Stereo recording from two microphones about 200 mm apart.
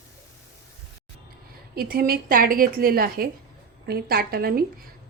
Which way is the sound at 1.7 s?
50° right (ahead or behind).